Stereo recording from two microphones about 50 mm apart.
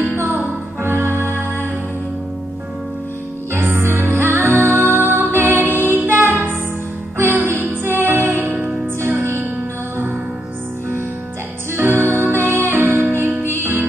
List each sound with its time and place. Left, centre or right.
0.0 s music: right
3.6 s music: right
7.5 s music: right
11.7 s music: right
13.6 s music: right